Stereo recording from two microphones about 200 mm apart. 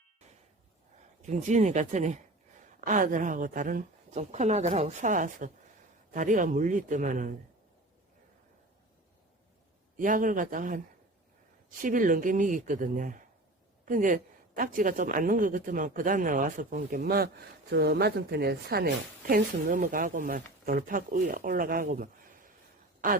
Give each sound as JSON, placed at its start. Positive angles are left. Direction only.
{"t": 1.2, "sound": "a woman's voice", "side_deg": -35}
{"t": 10.0, "sound": "a woman's voice", "side_deg": -40}
{"t": 11.8, "sound": "a woman's voice", "side_deg": -40}